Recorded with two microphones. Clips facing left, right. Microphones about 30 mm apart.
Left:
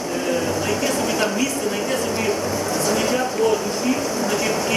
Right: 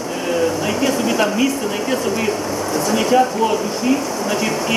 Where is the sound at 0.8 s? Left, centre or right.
Centre.